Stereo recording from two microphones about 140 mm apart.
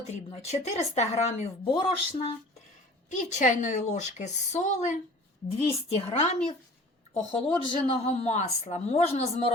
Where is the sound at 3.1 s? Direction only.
60° left (ahead or behind).